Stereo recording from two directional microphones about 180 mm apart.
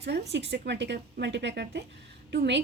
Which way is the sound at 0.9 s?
65° right (ahead or behind).